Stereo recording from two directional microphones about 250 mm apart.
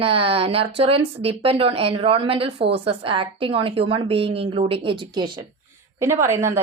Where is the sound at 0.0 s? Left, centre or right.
Right.